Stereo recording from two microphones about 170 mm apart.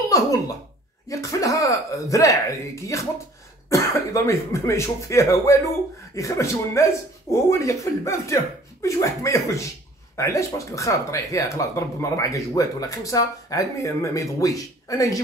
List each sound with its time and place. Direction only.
0.1 s speech: 20° left (ahead or behind)